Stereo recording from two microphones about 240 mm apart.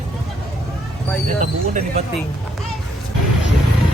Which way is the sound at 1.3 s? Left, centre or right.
Right.